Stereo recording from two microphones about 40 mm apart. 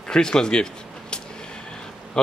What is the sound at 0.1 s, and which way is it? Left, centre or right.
Speech, centre.